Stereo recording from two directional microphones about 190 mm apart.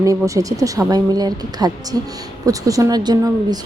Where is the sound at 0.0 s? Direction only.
15° right (ahead or behind).